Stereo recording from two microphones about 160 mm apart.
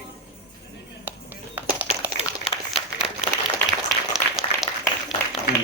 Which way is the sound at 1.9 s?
40° left (ahead or behind).